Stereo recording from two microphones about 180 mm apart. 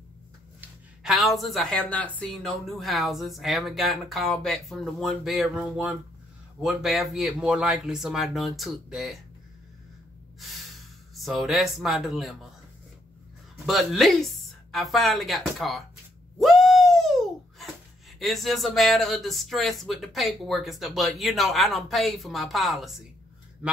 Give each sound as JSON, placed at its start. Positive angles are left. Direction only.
{"t": 0.6, "sound": "speech", "side_deg": 0}
{"t": 11.1, "sound": "speech", "side_deg": 0}
{"t": 13.7, "sound": "speech", "side_deg": 0}
{"t": 16.3, "sound": "a sound", "side_deg": 0}
{"t": 18.2, "sound": "speech", "side_deg": 0}